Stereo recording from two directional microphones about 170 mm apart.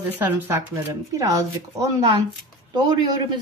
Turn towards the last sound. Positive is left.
turn(degrees=-25)  # may be behind; listen again after turning